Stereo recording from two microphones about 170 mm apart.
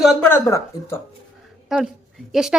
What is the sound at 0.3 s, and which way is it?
Speech, 20° left (ahead or behind).